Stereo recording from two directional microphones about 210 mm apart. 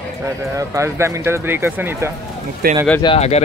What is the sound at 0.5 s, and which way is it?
Speech, 15° right (ahead or behind).